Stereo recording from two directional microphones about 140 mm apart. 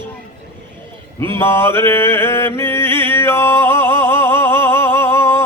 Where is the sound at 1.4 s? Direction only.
20° left (ahead or behind).